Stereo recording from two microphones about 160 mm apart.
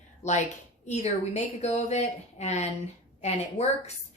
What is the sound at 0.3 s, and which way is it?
Speech, 45° left (ahead or behind).